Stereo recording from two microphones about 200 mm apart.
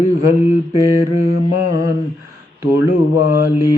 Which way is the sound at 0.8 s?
15° right (ahead or behind).